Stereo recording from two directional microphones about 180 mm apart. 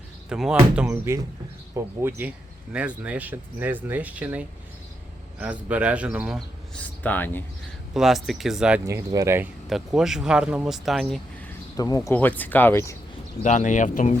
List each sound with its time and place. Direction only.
0.3 s a man's voice: 5° right (ahead or behind)
0.9 s speech: 15° right (ahead or behind)
6.7 s speech: 10° left (ahead or behind)
7.9 s a man's voice: centre (ahead or behind)
8.9 s speech: 15° right (ahead or behind)
9.6 s a man's voice: centre (ahead or behind)
11.8 s speech: 20° left (ahead or behind)
13.4 s speech: 40° left (ahead or behind)